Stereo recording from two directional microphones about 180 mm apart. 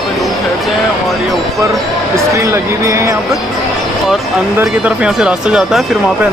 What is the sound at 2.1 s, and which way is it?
Speech, 15° right (ahead or behind).